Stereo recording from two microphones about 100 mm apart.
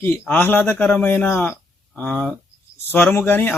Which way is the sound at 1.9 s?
10° left (ahead or behind).